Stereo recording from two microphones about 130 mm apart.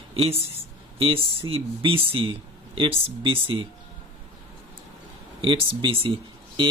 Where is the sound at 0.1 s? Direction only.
50° right (ahead or behind).